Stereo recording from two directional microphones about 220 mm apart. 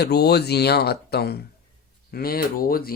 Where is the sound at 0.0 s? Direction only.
45° left (ahead or behind).